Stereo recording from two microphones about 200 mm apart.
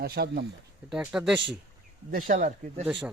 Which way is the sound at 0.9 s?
5° right (ahead or behind).